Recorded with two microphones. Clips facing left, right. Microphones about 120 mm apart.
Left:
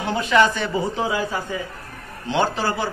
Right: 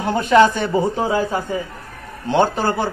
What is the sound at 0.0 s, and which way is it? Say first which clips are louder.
A man's voice: right 5 dB; 45° right (ahead or behind).